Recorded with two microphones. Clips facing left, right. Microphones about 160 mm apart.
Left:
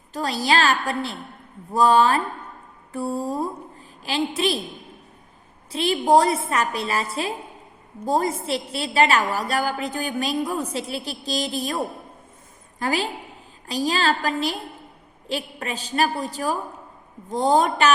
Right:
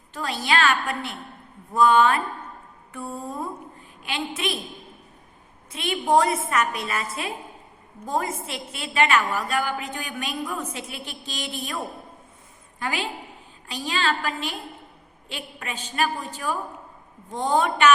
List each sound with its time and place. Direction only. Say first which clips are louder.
0.1 s a woman's voice: left 3 dB; 35° left (ahead or behind)
5.7 s a woman's voice: left 3 dB; 35° left (ahead or behind)
12.8 s a woman's voice: left 4 dB; 40° left (ahead or behind)